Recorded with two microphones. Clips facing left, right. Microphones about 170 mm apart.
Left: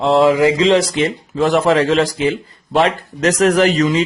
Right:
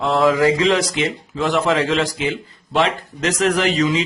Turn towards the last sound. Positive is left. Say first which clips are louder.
# left 4 dB
turn(degrees=45)  # may be behind; listen again after turning